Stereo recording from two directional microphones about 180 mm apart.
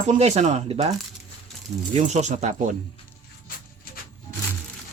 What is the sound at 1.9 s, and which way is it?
Speech, 40° right (ahead or behind).